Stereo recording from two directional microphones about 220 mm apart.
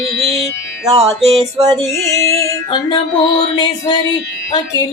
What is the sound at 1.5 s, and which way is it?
Music, 15° right (ahead or behind).